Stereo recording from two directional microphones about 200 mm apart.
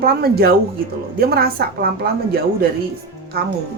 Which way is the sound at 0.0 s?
50° right (ahead or behind).